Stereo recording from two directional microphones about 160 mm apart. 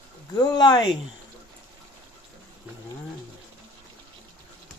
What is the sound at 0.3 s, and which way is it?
Speech, 25° left (ahead or behind).